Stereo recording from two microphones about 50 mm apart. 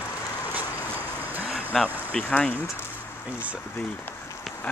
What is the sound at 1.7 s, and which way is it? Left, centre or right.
Speech, centre.